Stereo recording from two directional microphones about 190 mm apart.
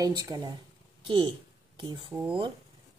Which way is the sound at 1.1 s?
25° right (ahead or behind).